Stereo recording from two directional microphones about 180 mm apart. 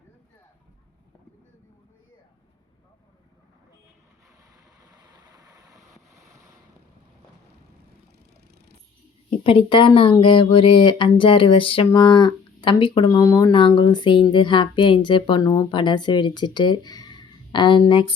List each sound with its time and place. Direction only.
9.4 s speech: 30° left (ahead or behind)